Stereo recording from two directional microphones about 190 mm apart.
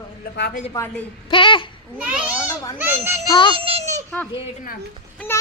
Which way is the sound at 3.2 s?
25° left (ahead or behind).